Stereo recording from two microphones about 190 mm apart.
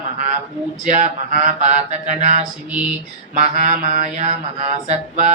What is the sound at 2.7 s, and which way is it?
Mantra, 5° right (ahead or behind).